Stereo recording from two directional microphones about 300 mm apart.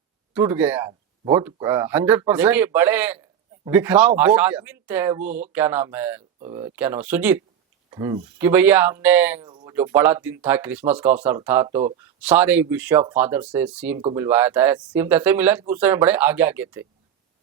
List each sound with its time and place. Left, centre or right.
0.3 s speech: centre
9.5 s a sound: centre
9.7 s speech: centre
14.0 s speech: centre
14.3 s speech: centre